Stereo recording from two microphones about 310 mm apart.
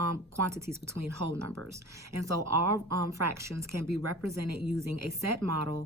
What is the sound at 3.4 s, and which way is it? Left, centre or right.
Speech, centre.